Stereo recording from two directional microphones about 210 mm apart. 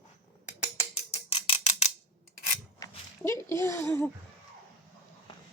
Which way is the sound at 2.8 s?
15° left (ahead or behind).